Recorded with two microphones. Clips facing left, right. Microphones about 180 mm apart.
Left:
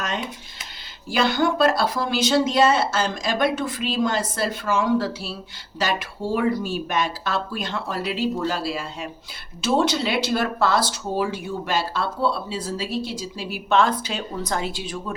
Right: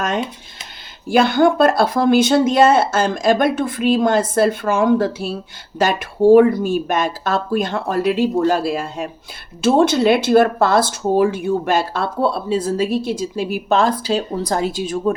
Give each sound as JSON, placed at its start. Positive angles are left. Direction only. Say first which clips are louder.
{"t": 1.1, "sound": "speech", "louder": "right 7 dB", "side_deg": -50}